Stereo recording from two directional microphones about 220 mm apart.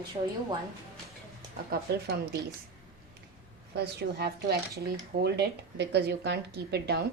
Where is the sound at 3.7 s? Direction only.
50° right (ahead or behind).